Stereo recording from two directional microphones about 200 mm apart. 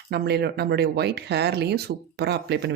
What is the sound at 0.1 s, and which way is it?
Speech, 55° right (ahead or behind).